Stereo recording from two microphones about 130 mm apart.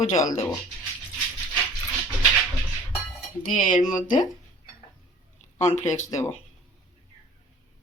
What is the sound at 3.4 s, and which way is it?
Speech, 75° left (ahead or behind).